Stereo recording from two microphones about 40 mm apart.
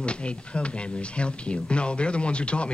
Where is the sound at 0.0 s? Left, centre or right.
Left.